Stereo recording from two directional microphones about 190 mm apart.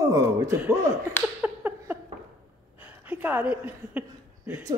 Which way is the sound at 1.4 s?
10° right (ahead or behind).